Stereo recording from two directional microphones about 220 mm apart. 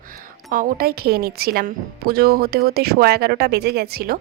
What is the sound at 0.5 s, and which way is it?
A woman's voice, 40° right (ahead or behind).